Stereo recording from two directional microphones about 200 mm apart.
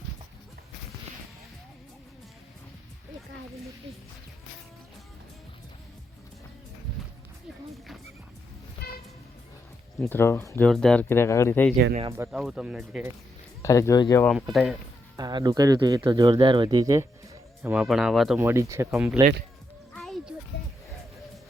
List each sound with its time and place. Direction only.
8.8 s music: 55° left (ahead or behind)
10.0 s speech: 10° left (ahead or behind)
12.3 s speech: centre (ahead or behind)
13.6 s speech: 15° left (ahead or behind)
14.3 s speech: centre (ahead or behind)
15.1 s speech: 20° right (ahead or behind)
17.6 s speech: 5° right (ahead or behind)
18.3 s speech: 15° right (ahead or behind)
19.9 s a sound: centre (ahead or behind)